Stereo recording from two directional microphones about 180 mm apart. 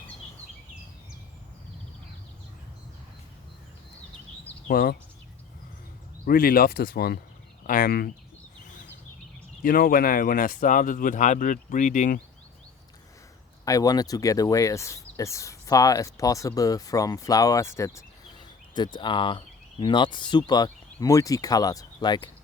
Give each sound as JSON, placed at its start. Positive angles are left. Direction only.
{"t": 4.7, "sound": "speech", "side_deg": 55}
{"t": 6.2, "sound": "speech", "side_deg": 55}
{"t": 8.6, "sound": "a sound", "side_deg": 45}
{"t": 9.6, "sound": "speech", "side_deg": 55}
{"t": 13.7, "sound": "speech", "side_deg": 20}